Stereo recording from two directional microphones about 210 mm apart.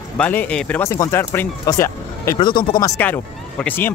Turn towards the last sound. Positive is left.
turn(degrees=10)  # may be behind; listen again after turning